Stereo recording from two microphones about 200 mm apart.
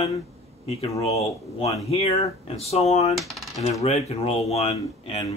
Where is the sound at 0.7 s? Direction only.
30° left (ahead or behind).